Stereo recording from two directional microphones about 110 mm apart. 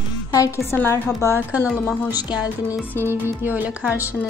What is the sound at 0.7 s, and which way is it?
Speech, 20° left (ahead or behind).